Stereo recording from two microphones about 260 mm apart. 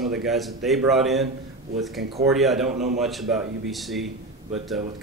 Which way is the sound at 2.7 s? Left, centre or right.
Right.